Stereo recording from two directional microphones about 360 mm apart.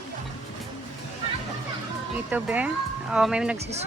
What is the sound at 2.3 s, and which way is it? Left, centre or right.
Speech, centre.